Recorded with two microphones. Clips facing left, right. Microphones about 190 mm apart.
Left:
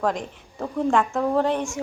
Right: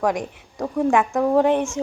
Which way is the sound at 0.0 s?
15° right (ahead or behind).